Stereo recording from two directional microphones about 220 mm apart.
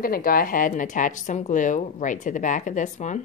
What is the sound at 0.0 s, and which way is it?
A woman's voice, 40° left (ahead or behind).